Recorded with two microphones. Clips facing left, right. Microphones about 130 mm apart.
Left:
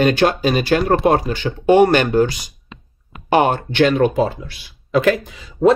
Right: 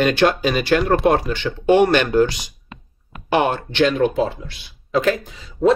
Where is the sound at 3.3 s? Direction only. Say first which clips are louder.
Left 3 dB; 50° left (ahead or behind).